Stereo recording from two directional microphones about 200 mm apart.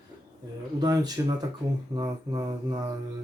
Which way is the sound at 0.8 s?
20° right (ahead or behind).